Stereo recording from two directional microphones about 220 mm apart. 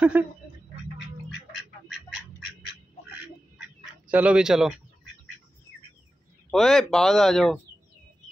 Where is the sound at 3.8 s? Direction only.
5° right (ahead or behind).